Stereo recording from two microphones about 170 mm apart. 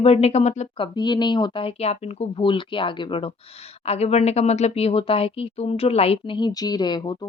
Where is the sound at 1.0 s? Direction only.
25° left (ahead or behind).